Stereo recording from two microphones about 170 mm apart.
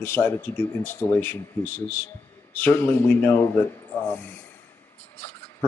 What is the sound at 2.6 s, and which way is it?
Speech, 10° left (ahead or behind).